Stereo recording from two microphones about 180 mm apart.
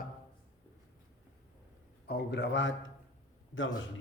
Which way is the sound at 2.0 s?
70° left (ahead or behind).